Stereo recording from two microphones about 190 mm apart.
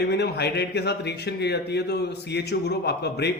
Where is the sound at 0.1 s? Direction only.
60° left (ahead or behind).